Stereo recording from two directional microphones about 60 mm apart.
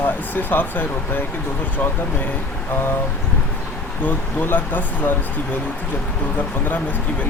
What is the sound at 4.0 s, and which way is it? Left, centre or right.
Speech, left.